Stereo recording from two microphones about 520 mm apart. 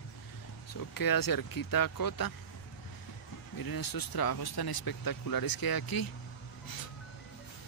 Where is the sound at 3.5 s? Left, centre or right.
Left.